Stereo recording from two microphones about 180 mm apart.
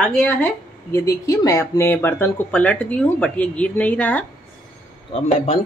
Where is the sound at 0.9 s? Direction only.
15° left (ahead or behind).